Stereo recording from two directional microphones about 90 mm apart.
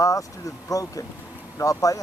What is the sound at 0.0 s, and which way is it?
Speech, 40° left (ahead or behind).